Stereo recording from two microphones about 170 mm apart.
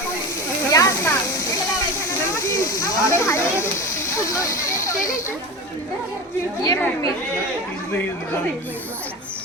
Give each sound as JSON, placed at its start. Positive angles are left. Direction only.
{"t": 0.7, "sound": "a sound", "side_deg": 20}
{"t": 2.6, "sound": "snake", "side_deg": 20}
{"t": 6.6, "sound": "a woman's voice", "side_deg": 15}